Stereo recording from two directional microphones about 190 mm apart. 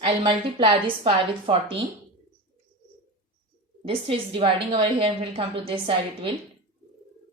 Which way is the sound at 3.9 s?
30° right (ahead or behind).